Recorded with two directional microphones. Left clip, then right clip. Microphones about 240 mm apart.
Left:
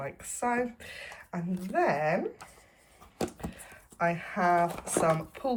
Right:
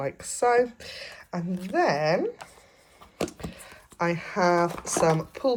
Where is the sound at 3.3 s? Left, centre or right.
Centre.